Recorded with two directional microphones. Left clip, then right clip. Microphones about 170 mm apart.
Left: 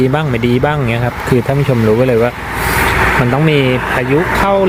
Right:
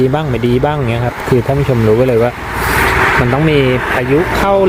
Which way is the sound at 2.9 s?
75° left (ahead or behind).